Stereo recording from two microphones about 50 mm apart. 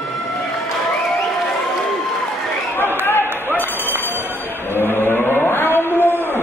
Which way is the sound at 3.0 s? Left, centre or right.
Left.